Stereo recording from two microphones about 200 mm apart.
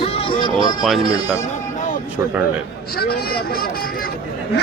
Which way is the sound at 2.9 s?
50° left (ahead or behind).